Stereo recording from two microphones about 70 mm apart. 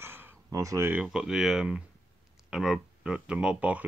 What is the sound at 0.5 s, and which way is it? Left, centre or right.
Speech, right.